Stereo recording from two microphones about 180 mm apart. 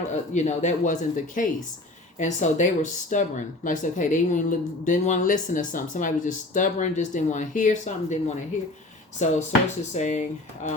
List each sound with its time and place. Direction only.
0.3 s speech: 40° left (ahead or behind)